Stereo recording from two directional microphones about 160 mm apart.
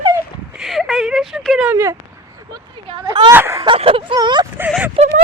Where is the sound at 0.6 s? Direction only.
Centre (ahead or behind).